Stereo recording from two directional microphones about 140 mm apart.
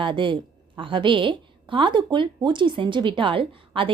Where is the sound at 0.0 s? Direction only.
35° right (ahead or behind).